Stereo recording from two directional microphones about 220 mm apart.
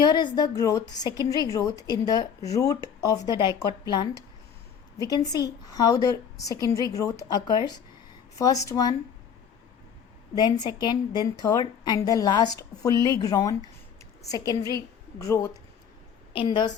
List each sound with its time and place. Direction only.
0.0 s a woman's voice: 20° left (ahead or behind)
10.3 s a woman's voice: 20° left (ahead or behind)